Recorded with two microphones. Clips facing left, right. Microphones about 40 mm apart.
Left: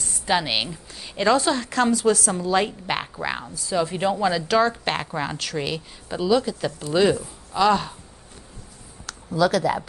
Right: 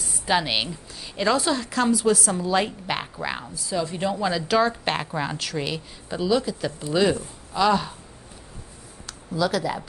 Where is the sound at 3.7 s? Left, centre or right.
Left.